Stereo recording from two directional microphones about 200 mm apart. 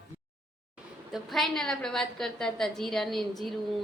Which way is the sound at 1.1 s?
Centre (ahead or behind).